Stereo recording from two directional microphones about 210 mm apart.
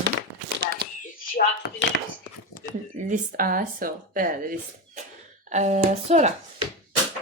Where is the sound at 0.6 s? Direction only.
50° right (ahead or behind).